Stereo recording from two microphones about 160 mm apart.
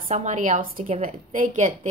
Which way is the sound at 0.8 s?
40° right (ahead or behind).